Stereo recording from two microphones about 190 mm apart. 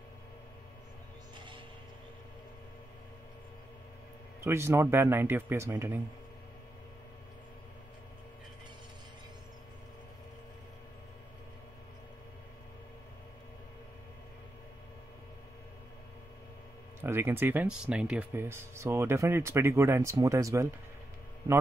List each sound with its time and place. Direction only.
1.3 s music: 25° right (ahead or behind)
4.4 s speech: 15° right (ahead or behind)
17.0 s speech: 10° right (ahead or behind)